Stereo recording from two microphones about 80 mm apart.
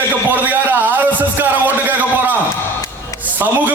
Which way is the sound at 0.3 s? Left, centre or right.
Right.